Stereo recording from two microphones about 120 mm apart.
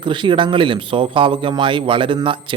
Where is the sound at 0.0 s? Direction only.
40° right (ahead or behind).